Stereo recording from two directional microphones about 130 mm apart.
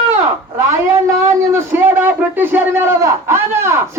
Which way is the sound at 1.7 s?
15° right (ahead or behind).